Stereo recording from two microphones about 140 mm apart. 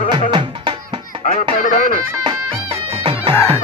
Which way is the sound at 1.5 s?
80° left.